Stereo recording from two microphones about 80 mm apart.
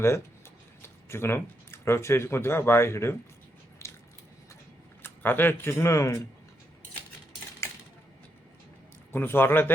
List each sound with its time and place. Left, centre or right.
0.8 s speech: left
3.8 s a sound: left
5.0 s speech: left
9.1 s speech: left